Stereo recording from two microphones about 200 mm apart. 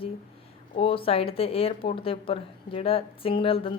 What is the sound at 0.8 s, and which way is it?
Speech, 25° left (ahead or behind).